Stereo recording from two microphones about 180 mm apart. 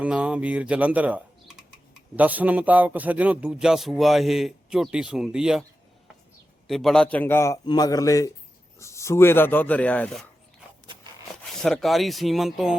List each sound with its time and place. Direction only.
0.0 s speech: 5° right (ahead or behind)
6.7 s a man's voice: centre (ahead or behind)
11.5 s speech: centre (ahead or behind)